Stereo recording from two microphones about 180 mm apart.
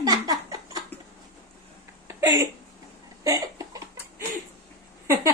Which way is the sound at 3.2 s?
20° right (ahead or behind).